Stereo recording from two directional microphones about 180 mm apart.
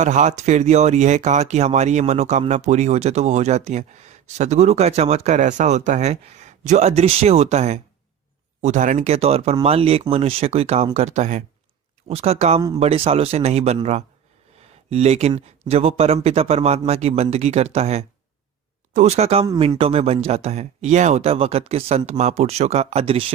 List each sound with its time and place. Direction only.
0.0 s speech: 45° right (ahead or behind)